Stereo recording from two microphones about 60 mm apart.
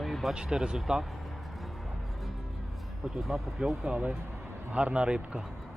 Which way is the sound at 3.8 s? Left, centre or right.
Centre.